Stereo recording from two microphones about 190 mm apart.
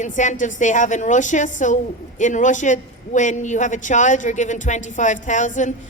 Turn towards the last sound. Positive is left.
turn(degrees=40)  # may be behind; listen again after turning